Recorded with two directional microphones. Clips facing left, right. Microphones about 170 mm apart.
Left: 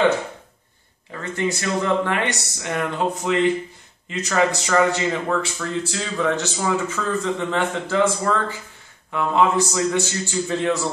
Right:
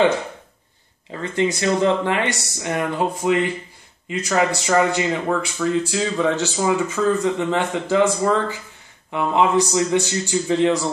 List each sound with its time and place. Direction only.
1.3 s speech: 15° right (ahead or behind)